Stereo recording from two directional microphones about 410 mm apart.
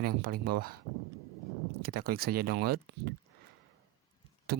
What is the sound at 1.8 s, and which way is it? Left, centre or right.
Speech, right.